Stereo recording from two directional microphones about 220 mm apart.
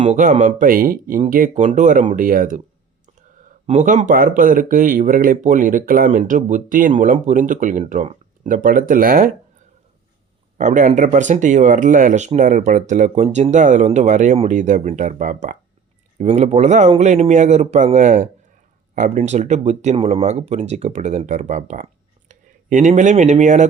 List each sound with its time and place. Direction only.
0.0 s speech: 30° right (ahead or behind)
3.7 s speech: 35° right (ahead or behind)
10.6 s speech: 35° right (ahead or behind)